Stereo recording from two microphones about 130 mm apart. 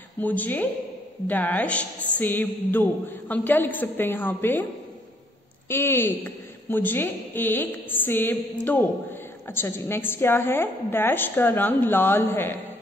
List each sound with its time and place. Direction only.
0.2 s a woman's voice: 10° left (ahead or behind)
5.7 s a woman's voice: 20° left (ahead or behind)